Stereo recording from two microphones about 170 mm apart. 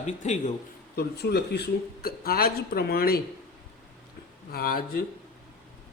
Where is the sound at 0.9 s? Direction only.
70° left (ahead or behind).